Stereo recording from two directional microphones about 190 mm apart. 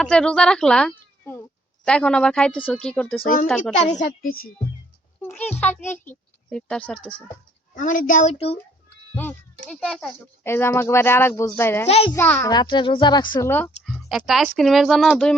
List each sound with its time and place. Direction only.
0.0 s speech: 5° left (ahead or behind)
3.8 s a woman's voice: 40° left (ahead or behind)
5.2 s a child's voice: 5° left (ahead or behind)
7.8 s speech: 45° left (ahead or behind)
9.1 s speech: 5° left (ahead or behind)
11.9 s speech: 30° left (ahead or behind)
12.1 s a child's voice: 10° left (ahead or behind)
13.5 s speech: 10° left (ahead or behind)
13.9 s speech: centre (ahead or behind)